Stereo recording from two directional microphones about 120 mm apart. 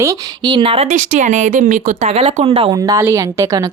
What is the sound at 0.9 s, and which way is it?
Speech, 90° right.